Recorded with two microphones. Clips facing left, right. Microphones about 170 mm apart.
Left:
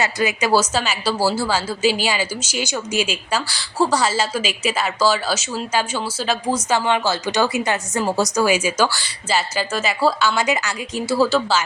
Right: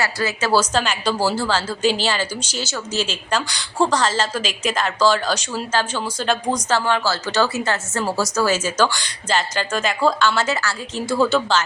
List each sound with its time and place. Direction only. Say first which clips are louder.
0.0 s speech: left 2 dB; 15° left (ahead or behind)
11.1 s speech: even; 5° left (ahead or behind)